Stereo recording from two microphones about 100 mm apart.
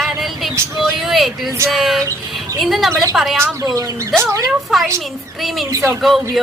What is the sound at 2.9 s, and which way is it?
Speech, 30° right (ahead or behind).